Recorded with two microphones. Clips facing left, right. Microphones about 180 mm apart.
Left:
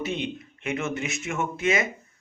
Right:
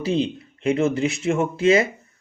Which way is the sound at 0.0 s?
35° right (ahead or behind).